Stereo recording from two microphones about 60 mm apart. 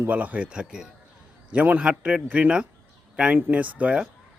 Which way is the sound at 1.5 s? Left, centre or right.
Right.